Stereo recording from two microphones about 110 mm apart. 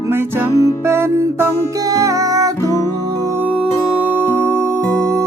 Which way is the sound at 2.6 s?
25° left (ahead or behind).